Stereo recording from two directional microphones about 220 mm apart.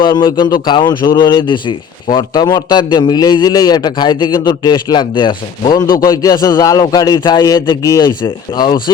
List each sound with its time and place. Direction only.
0.0 s a man's voice: 20° left (ahead or behind)